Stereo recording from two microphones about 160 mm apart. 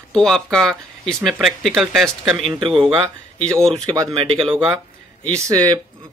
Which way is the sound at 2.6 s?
35° right (ahead or behind).